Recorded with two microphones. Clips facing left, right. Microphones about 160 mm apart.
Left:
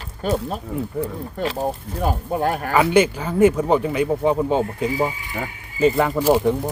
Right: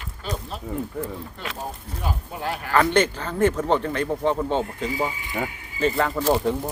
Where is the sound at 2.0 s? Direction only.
50° left (ahead or behind).